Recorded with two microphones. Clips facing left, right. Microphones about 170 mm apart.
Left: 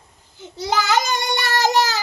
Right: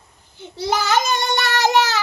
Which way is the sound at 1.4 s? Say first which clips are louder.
Even; 40° left (ahead or behind).